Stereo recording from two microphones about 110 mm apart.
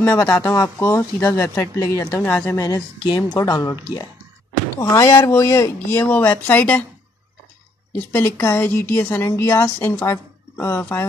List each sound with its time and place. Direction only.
0.0 s a woman's voice: 25° left (ahead or behind)
2.2 s a woman's voice: 10° left (ahead or behind)
2.5 s a woman's voice: 30° left (ahead or behind); by 6.8 s 15° left (ahead or behind)
7.9 s a woman's voice: 20° left (ahead or behind)